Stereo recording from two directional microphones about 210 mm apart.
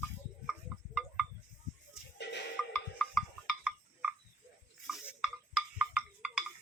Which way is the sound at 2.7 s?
5° left (ahead or behind).